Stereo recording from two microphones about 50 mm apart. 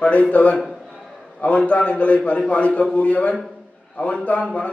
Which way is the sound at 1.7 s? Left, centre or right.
Left.